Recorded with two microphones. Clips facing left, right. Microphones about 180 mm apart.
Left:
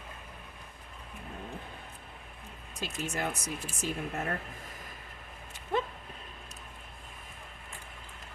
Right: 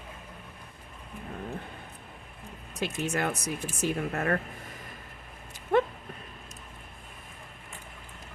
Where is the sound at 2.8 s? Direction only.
70° right (ahead or behind).